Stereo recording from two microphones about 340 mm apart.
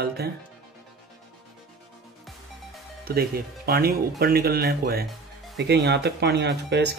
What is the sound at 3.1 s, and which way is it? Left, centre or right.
Speech, right.